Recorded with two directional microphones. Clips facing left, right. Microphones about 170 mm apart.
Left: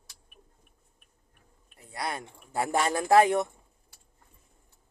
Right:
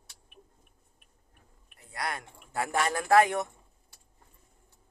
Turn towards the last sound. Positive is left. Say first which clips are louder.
# left 2 dB
turn(degrees=30)  # may be behind; listen again after turning